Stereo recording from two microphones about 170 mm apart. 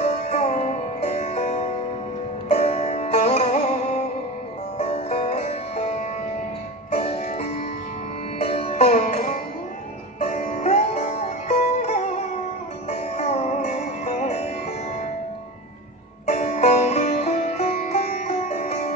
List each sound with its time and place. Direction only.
0.0 s music: 40° left (ahead or behind)
4.7 s music: 40° left (ahead or behind)
10.2 s sitar: 40° left (ahead or behind)
12.9 s music: 40° left (ahead or behind)
16.3 s music: 40° left (ahead or behind)